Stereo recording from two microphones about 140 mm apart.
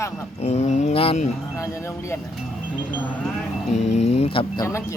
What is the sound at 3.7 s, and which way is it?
Speech, 55° left (ahead or behind).